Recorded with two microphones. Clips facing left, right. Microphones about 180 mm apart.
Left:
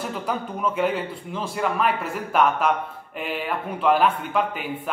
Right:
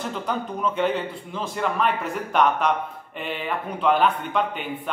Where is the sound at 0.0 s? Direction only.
5° left (ahead or behind).